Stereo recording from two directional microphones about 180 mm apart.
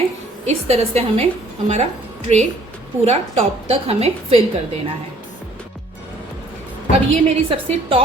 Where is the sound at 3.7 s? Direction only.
35° right (ahead or behind).